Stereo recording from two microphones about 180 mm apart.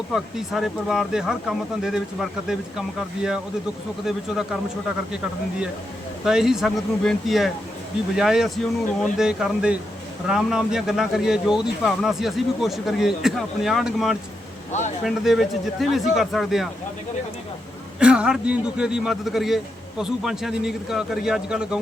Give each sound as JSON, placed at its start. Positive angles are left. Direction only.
{"t": 0.1, "sound": "speech", "side_deg": 0}
{"t": 6.2, "sound": "speech", "side_deg": -5}
{"t": 14.7, "sound": "speech", "side_deg": 40}
{"t": 15.0, "sound": "speech", "side_deg": 0}
{"t": 18.0, "sound": "speech", "side_deg": -5}